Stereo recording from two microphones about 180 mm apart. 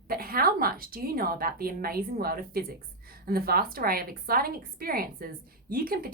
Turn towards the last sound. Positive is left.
turn(degrees=-55)  # may be behind; listen again after turning